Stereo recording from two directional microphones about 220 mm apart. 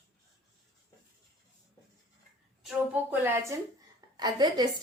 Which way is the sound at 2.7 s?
5° right (ahead or behind).